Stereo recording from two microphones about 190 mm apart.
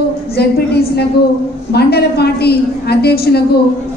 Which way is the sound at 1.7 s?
60° left (ahead or behind).